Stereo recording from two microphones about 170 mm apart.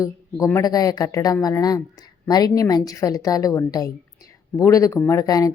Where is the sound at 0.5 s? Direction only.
20° left (ahead or behind).